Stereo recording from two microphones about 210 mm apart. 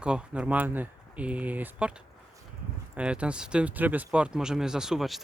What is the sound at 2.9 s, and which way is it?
Speech, 5° right (ahead or behind).